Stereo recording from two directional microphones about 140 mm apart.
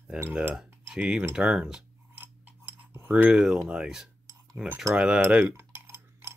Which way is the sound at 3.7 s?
5° right (ahead or behind).